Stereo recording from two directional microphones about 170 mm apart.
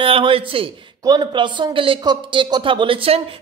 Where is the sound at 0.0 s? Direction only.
30° right (ahead or behind).